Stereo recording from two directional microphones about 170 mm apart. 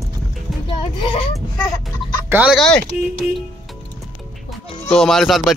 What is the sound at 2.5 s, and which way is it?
Speech, 5° left (ahead or behind).